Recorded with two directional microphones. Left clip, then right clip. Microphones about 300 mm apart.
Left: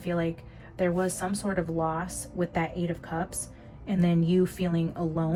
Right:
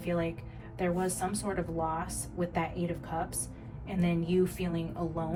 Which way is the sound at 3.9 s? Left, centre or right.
Left.